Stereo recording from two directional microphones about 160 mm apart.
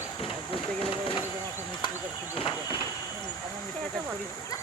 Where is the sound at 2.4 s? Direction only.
35° left (ahead or behind).